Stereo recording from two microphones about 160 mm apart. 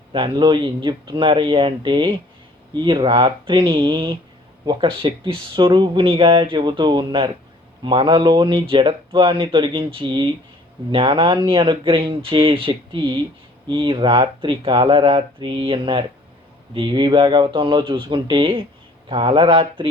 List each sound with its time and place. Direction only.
0.1 s speech: 30° right (ahead or behind)